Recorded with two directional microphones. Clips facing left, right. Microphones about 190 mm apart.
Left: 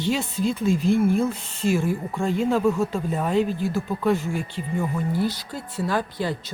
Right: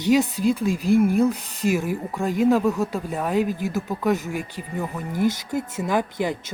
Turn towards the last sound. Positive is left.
turn(degrees=-20)  # may be behind; listen again after turning